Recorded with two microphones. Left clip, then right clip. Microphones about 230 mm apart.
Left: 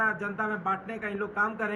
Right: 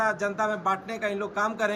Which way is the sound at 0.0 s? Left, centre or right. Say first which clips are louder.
Right 3 dB; right.